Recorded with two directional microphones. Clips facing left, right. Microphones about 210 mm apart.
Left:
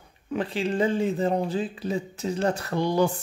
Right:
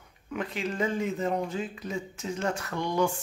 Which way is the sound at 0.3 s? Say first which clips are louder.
Left 6 dB; 30° left (ahead or behind).